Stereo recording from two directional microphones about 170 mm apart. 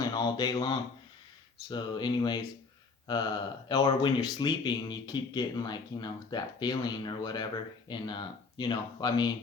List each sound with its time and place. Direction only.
0.0 s mantra: 25° left (ahead or behind)
1.6 s speech: 25° left (ahead or behind)